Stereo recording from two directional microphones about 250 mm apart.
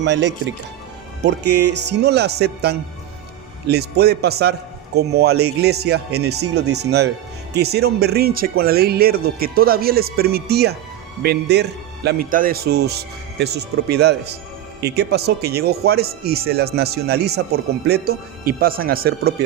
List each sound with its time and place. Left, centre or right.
0.0 s speech: right